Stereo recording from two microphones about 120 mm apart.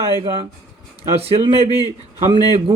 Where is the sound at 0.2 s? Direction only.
50° right (ahead or behind).